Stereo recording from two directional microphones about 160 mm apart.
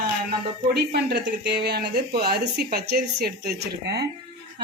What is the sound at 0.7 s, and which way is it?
Speech, 90° right.